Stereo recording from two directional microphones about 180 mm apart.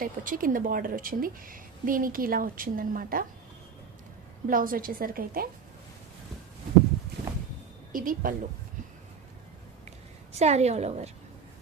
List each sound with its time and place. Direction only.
0.0 s speech: 50° right (ahead or behind)
4.4 s speech: 50° right (ahead or behind)
7.9 s speech: 50° right (ahead or behind)
10.3 s a woman's voice: 35° right (ahead or behind)